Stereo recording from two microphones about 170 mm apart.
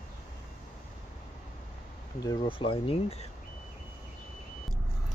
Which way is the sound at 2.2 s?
30° left (ahead or behind).